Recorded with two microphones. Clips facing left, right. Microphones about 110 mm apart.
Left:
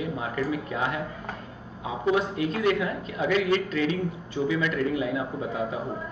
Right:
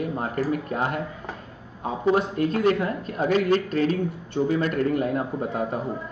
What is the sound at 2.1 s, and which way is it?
Speech, 45° right (ahead or behind).